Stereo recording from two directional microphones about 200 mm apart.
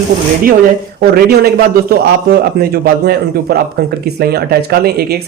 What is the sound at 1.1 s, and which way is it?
Speech, 50° right (ahead or behind).